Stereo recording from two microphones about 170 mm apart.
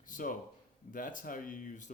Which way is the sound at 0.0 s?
50° left (ahead or behind).